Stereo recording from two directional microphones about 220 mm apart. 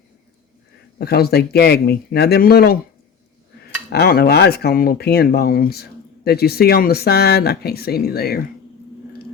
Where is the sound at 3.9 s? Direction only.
45° left (ahead or behind).